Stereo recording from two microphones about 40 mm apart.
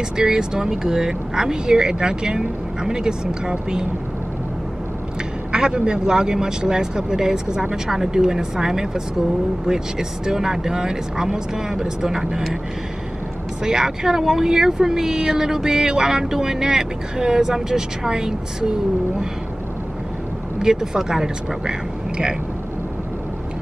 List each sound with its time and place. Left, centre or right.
0.2 s speech: centre
5.5 s speech: centre
13.7 s speech: centre
20.5 s speech: centre